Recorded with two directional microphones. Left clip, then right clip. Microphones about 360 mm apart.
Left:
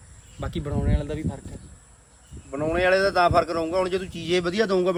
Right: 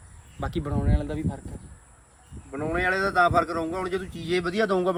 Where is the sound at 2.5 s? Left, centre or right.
Left; by 5.0 s centre.